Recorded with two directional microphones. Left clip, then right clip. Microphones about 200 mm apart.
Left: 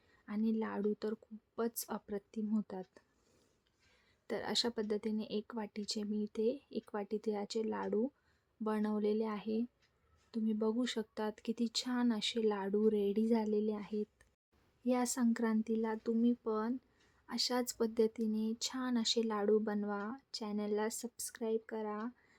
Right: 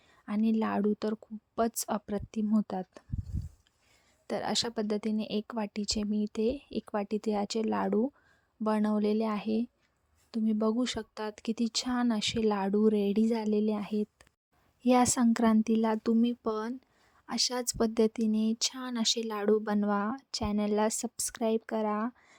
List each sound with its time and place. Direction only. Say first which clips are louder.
0.3 s speech: right 8 dB; 40° right (ahead or behind)
4.3 s speech: right 5 dB; 35° right (ahead or behind)